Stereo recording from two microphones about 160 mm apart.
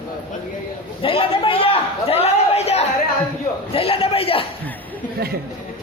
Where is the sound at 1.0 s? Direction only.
35° left (ahead or behind).